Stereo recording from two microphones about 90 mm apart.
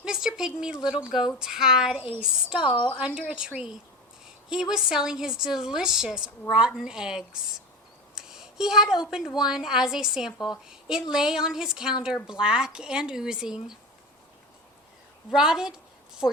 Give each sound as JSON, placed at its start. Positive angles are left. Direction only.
{"t": 0.0, "sound": "a woman's voice", "side_deg": -5}
{"t": 2.6, "sound": "a woman's voice", "side_deg": 60}
{"t": 3.2, "sound": "a woman's voice", "side_deg": -10}
{"t": 15.3, "sound": "a woman's voice", "side_deg": -5}